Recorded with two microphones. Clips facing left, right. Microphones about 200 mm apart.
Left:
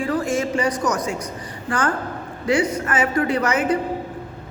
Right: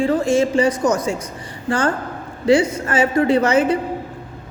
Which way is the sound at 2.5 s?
25° right (ahead or behind).